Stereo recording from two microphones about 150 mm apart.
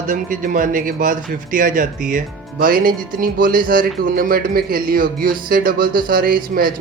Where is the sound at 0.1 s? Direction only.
65° right (ahead or behind).